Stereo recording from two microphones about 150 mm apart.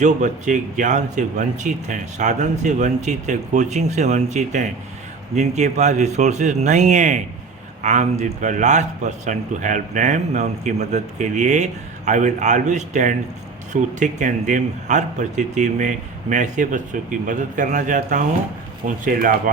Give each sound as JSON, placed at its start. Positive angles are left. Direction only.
{"t": 0.0, "sound": "a man's voice", "side_deg": -55}